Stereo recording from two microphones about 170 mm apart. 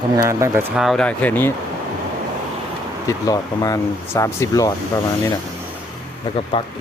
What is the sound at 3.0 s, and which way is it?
Speech, 20° left (ahead or behind).